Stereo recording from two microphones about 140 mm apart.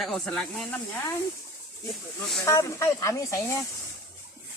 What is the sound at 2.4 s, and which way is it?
Speech, 20° left (ahead or behind).